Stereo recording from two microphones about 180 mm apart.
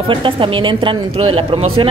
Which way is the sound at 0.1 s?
30° right (ahead or behind).